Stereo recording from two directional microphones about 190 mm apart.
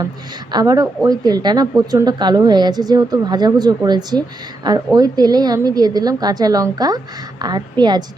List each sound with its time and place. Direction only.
0.5 s a woman's voice: 20° right (ahead or behind)